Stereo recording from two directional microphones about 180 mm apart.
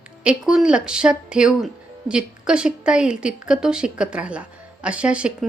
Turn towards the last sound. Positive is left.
turn(degrees=-5)  # may be behind; listen again after turning